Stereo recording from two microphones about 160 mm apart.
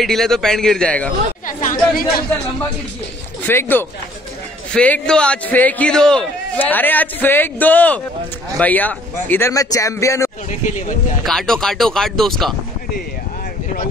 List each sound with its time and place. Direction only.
0.0 s speech: centre (ahead or behind)
1.6 s speech: 60° left (ahead or behind)
3.4 s a man's voice: 15° left (ahead or behind)
11.2 s speech: 5° left (ahead or behind)